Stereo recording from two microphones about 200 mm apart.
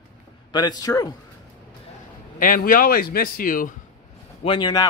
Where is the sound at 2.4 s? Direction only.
45° left (ahead or behind).